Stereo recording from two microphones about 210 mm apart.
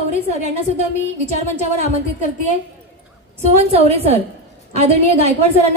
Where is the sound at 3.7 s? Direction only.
30° right (ahead or behind).